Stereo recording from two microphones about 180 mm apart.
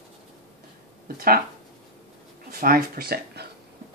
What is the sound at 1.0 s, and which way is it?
Speech, 55° right (ahead or behind).